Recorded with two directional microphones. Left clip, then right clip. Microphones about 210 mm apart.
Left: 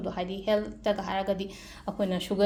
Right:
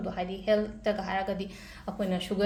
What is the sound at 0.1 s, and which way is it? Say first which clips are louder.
A woman's voice: even; 35° left (ahead or behind).